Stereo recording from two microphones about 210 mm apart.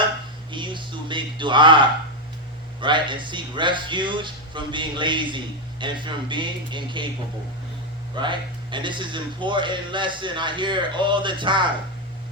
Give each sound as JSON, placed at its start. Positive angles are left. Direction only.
{"t": 0.5, "sound": "a sound", "side_deg": -20}
{"t": 2.8, "sound": "a man's voice", "side_deg": -20}
{"t": 8.1, "sound": "a man's voice", "side_deg": -20}